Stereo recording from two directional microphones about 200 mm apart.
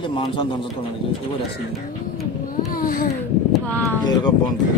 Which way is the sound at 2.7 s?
45° left (ahead or behind).